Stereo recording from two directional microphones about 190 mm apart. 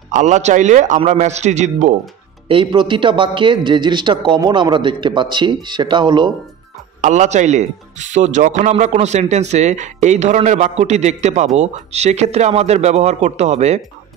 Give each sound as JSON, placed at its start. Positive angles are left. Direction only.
{"t": 0.1, "sound": "a man's voice", "side_deg": -40}
{"t": 2.4, "sound": "a man's voice", "side_deg": -25}
{"t": 7.0, "sound": "a man's voice", "side_deg": -40}